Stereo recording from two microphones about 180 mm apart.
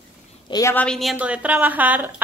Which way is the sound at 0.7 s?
5° left (ahead or behind).